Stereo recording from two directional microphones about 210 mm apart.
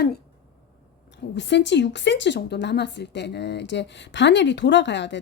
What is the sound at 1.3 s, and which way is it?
Speech, 55° left (ahead or behind).